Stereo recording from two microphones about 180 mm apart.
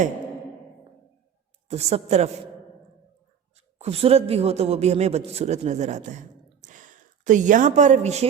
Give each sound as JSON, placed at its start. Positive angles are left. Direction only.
{"t": 1.6, "sound": "a woman's voice", "side_deg": -35}
{"t": 3.8, "sound": "a man's voice", "side_deg": -35}